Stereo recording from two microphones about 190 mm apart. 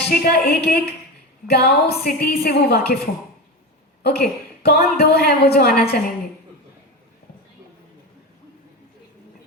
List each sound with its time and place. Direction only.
0.0 s a woman's voice: 50° left (ahead or behind)
4.0 s a woman's voice: 55° left (ahead or behind)